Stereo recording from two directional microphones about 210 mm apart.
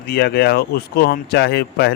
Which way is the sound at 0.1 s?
50° left (ahead or behind).